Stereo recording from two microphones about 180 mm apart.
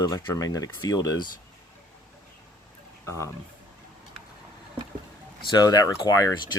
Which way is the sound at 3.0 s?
15° left (ahead or behind).